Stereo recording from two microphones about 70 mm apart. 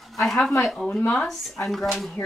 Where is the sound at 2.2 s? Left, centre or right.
Left.